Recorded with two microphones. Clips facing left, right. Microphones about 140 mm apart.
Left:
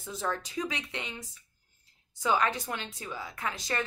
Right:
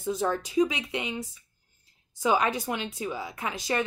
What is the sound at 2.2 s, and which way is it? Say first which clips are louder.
A woman's voice: right 3 dB; 15° right (ahead or behind).